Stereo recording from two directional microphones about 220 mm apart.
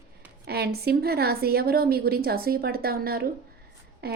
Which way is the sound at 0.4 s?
45° right (ahead or behind).